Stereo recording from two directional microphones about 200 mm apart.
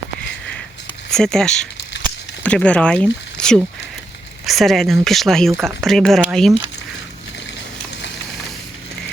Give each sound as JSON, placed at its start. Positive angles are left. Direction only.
{"t": 1.1, "sound": "speech", "side_deg": 5}